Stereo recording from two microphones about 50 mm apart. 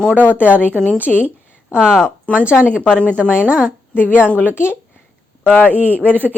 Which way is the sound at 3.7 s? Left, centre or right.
Right.